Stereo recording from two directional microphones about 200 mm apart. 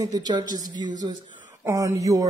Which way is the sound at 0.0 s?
20° right (ahead or behind).